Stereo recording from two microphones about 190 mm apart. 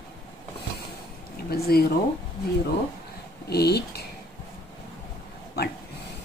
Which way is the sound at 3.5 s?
60° left (ahead or behind).